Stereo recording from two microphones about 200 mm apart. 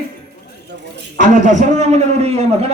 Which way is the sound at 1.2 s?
40° right (ahead or behind).